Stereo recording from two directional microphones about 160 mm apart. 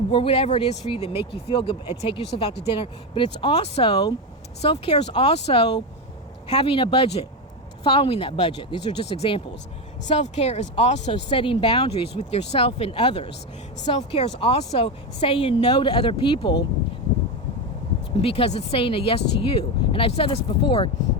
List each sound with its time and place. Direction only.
0.1 s speech: 35° left (ahead or behind)
18.2 s speech: 35° left (ahead or behind)